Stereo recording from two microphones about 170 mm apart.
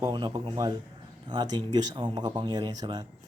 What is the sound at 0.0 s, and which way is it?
Speech, 25° right (ahead or behind).